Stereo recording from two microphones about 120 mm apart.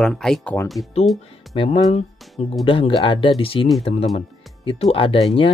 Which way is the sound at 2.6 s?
45° left (ahead or behind).